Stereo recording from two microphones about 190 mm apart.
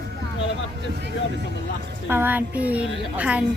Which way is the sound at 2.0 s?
10° right (ahead or behind).